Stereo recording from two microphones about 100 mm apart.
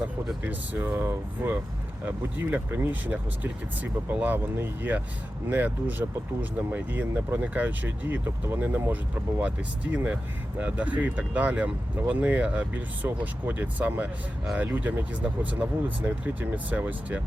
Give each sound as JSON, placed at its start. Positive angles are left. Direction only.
{"t": 0.4, "sound": "speech", "side_deg": -20}